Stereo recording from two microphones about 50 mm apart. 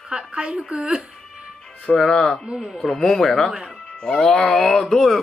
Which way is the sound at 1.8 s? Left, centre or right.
Centre.